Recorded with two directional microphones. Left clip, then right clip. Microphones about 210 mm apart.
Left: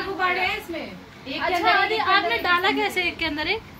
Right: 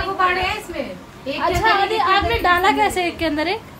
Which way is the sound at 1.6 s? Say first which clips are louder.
Right 3 dB; 40° right (ahead or behind).